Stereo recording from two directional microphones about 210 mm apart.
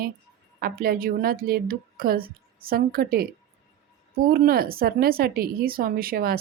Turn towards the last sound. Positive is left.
turn(degrees=-45)  # may be behind; listen again after turning